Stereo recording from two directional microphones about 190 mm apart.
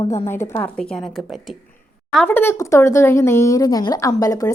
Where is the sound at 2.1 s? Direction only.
10° left (ahead or behind).